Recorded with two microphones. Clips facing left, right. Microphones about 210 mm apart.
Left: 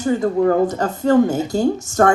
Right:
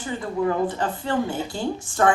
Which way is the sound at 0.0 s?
45° left (ahead or behind).